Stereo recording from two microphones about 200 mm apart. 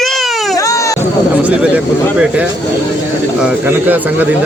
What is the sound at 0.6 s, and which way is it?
Baby cry, 15° left (ahead or behind).